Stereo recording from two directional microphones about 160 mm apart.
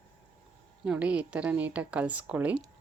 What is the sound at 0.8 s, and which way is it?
A woman's voice, 5° right (ahead or behind).